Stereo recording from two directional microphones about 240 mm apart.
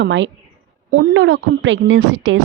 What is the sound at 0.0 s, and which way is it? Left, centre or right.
A woman's voice, right.